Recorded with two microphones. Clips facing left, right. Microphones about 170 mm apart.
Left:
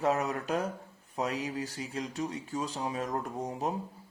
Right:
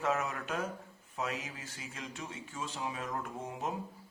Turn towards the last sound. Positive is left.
turn(degrees=35)  # may be behind; listen again after turning